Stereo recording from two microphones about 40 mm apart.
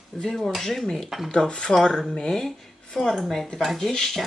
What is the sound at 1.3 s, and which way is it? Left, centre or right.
Speech, left.